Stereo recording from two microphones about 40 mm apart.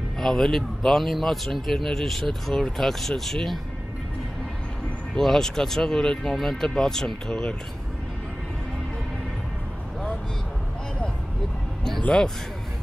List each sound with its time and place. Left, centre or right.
0.2 s a man's voice: centre
5.1 s a man's voice: centre